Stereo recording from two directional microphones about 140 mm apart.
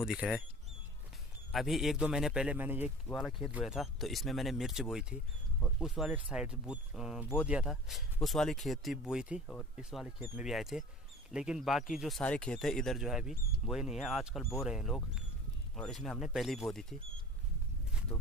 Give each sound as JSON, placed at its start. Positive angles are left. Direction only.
{"t": 0.0, "sound": "speech", "side_deg": -5}
{"t": 1.5, "sound": "speech", "side_deg": 0}
{"t": 3.1, "sound": "speech", "side_deg": 0}
{"t": 18.1, "sound": "speech", "side_deg": 20}